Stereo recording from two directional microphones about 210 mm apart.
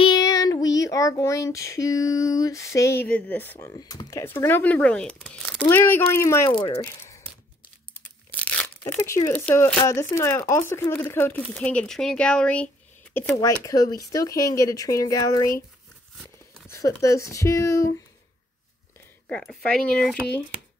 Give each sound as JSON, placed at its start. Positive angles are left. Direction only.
{"t": 0.0, "sound": "child singing", "side_deg": 20}
{"t": 6.8, "sound": "speech", "side_deg": 10}
{"t": 8.0, "sound": "crumpling", "side_deg": 5}
{"t": 9.8, "sound": "child singing", "side_deg": 15}
{"t": 16.5, "sound": "speech", "side_deg": 15}
{"t": 19.2, "sound": "speech", "side_deg": 5}